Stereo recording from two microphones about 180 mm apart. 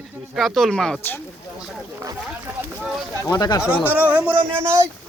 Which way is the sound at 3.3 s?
20° left (ahead or behind).